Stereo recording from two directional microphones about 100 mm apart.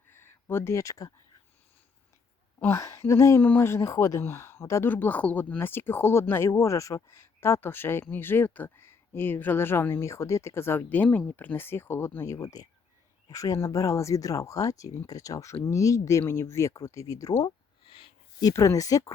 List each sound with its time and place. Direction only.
0.1 s speech: 25° left (ahead or behind)
2.6 s speech: 25° left (ahead or behind)
4.9 s speech: 15° left (ahead or behind); by 17.4 s 35° left (ahead or behind)
17.4 s a sound: 65° left (ahead or behind)
18.5 s speech: 30° left (ahead or behind)